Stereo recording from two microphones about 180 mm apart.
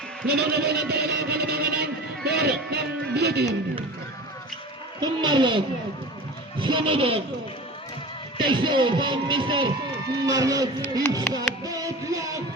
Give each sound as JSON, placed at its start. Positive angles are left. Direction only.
{"t": 0.3, "sound": "speech", "side_deg": -65}
{"t": 4.9, "sound": "speech", "side_deg": -25}
{"t": 8.4, "sound": "speech", "side_deg": -25}
{"t": 11.3, "sound": "music", "side_deg": -20}